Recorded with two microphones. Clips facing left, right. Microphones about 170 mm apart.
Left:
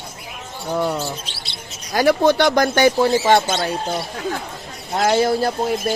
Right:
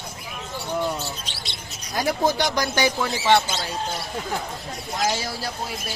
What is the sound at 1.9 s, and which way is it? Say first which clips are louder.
Speech: left 7 dB; 75° left (ahead or behind).